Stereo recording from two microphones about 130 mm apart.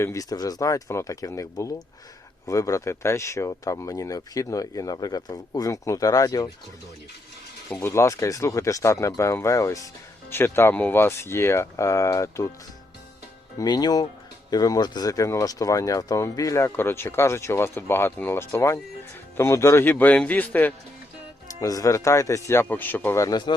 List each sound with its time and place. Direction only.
0.0 s speech: 25° left (ahead or behind)
7.7 s speech: 20° left (ahead or behind)
13.6 s a man's voice: 30° left (ahead or behind); by 20.7 s 15° left (ahead or behind)
21.6 s a man's voice: 25° left (ahead or behind)